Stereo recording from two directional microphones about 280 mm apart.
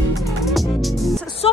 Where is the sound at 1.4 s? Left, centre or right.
Centre.